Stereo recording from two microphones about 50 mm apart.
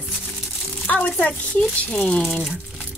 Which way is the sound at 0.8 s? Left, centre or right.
Left.